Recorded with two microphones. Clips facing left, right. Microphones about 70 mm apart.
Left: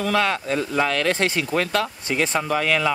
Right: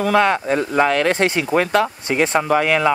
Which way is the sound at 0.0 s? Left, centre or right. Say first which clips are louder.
Right 6 dB; centre.